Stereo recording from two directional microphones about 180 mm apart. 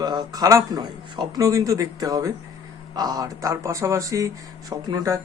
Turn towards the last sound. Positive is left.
turn(degrees=-20)  # may be behind; listen again after turning